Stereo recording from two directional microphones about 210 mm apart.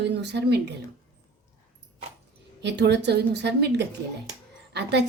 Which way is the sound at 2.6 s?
55° right (ahead or behind).